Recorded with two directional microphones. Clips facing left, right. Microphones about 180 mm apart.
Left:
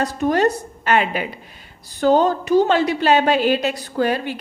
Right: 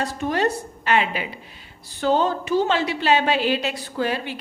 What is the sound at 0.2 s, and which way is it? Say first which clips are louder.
A woman's voice: left 6 dB; 45° left (ahead or behind).